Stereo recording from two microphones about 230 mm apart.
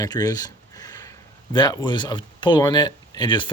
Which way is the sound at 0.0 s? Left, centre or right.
Centre.